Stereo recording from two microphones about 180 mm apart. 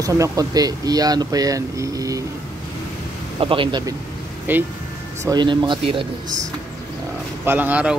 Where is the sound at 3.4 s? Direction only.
30° right (ahead or behind).